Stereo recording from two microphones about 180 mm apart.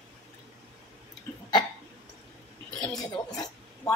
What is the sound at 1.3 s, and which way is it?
Hiccup, 15° left (ahead or behind).